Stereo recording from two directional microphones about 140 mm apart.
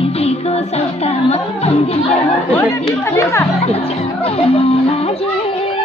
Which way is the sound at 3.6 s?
45° left (ahead or behind).